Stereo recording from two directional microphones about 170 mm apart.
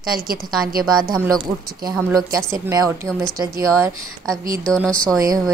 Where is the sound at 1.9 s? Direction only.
20° right (ahead or behind).